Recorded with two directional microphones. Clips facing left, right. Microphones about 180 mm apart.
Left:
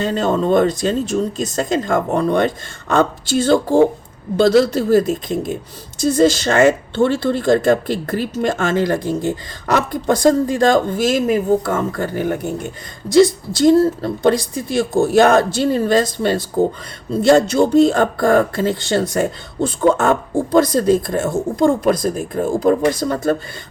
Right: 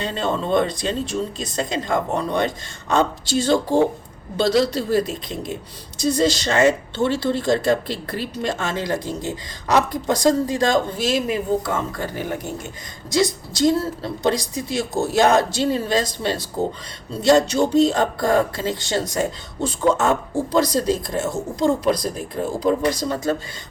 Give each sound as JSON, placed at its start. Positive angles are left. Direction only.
{"t": 0.0, "sound": "speech", "side_deg": 45}